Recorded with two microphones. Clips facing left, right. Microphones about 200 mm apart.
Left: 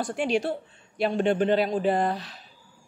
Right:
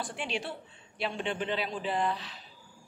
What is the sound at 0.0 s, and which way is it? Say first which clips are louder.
A woman's voice: left 10 dB; 45° left (ahead or behind).